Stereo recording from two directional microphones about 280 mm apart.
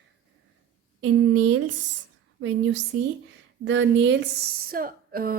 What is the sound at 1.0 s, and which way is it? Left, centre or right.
Speech, right.